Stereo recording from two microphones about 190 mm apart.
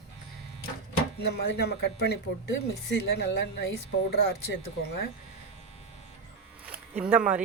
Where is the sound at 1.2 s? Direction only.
60° left (ahead or behind).